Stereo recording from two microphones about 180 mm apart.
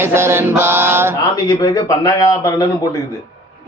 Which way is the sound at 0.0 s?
15° right (ahead or behind).